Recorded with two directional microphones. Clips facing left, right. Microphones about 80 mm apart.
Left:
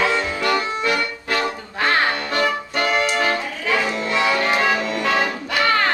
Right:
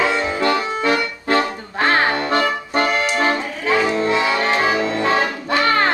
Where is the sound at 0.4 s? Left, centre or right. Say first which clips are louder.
Right 3 dB; right.